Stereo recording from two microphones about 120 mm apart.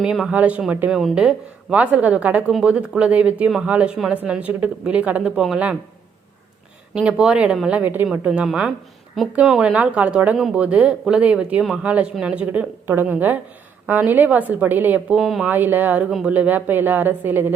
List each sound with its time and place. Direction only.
0.0 s speech: 5° right (ahead or behind)
6.9 s speech: 5° right (ahead or behind)
15.4 s speech: 15° right (ahead or behind)